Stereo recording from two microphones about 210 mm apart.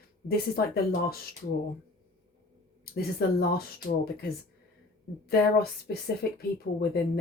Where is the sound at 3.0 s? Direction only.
50° left (ahead or behind).